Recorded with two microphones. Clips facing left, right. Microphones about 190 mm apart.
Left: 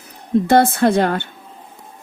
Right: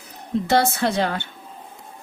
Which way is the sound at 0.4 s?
50° left (ahead or behind).